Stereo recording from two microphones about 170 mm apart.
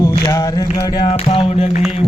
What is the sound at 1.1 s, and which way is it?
Music, 35° left (ahead or behind).